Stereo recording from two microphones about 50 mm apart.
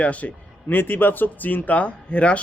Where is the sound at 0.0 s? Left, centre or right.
Left.